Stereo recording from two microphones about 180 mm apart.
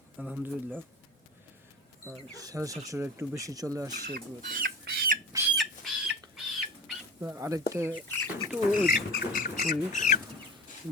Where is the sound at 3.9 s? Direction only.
60° right (ahead or behind).